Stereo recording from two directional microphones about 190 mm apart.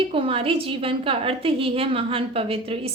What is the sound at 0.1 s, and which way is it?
A woman's voice, 30° right (ahead or behind).